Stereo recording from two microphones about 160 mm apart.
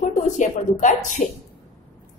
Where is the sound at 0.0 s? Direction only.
50° left (ahead or behind).